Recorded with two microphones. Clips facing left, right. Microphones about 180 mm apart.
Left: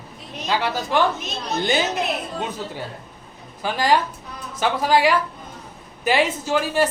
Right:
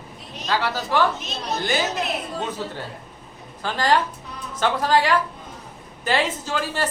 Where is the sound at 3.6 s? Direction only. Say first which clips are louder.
Left 1 dB; 10° left (ahead or behind).